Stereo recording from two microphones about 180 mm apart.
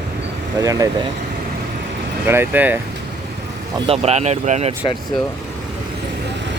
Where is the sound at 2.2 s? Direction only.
10° right (ahead or behind).